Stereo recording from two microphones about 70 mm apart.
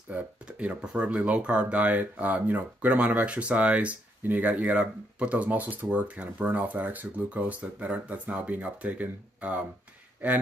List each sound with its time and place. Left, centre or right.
0.1 s speech: right